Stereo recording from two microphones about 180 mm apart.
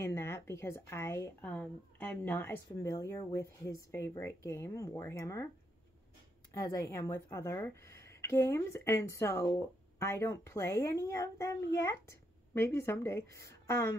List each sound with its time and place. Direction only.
0.0 s a woman's voice: 15° left (ahead or behind)
6.5 s a woman's voice: 20° left (ahead or behind)